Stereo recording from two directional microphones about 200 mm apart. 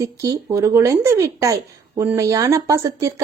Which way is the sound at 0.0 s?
15° right (ahead or behind).